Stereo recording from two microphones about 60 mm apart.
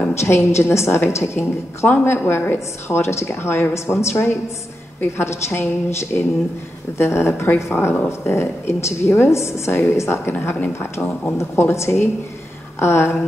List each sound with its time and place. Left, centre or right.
0.1 s a woman's voice: left